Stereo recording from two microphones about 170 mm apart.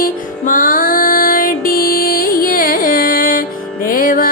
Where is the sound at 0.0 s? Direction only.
55° left (ahead or behind).